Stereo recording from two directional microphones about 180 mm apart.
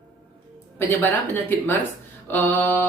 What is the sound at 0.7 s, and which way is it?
Speech, 10° left (ahead or behind).